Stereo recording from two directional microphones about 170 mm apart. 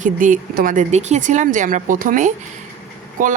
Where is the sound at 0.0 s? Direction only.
50° right (ahead or behind).